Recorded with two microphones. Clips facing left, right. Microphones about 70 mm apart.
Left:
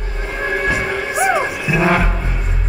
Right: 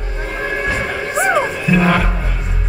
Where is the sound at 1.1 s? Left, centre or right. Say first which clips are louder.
Right 2 dB; centre.